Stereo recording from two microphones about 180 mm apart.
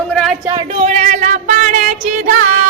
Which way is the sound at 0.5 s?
35° right (ahead or behind).